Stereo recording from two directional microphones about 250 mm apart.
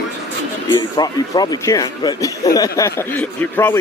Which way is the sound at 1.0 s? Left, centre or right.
Centre.